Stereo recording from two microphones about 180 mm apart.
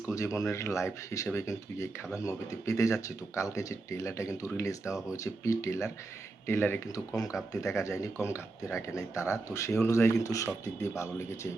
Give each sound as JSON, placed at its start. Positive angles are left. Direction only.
{"t": 0.1, "sound": "speech", "side_deg": 15}